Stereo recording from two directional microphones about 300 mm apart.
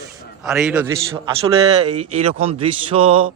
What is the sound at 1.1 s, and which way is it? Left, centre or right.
Speech, centre.